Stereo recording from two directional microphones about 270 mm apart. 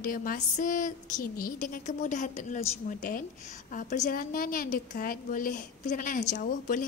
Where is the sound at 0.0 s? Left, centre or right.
Left.